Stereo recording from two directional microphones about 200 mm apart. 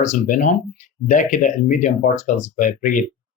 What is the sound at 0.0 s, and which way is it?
Speech, 35° left (ahead or behind).